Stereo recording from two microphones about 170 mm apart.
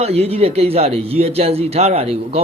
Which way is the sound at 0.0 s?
35° right (ahead or behind).